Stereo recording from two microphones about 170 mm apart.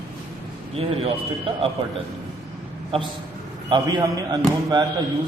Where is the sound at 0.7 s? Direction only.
35° right (ahead or behind).